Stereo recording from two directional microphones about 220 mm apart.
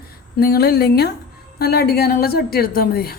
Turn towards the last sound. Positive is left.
turn(degrees=45)  # may be behind; listen again after turning